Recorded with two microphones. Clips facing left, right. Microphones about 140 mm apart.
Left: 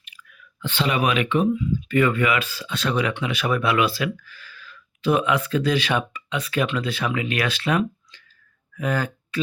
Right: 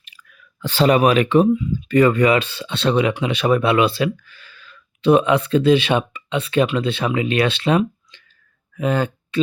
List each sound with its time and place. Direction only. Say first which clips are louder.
0.0 s clicking: even; 35° right (ahead or behind)
1.9 s speech: right 6 dB; 35° right (ahead or behind)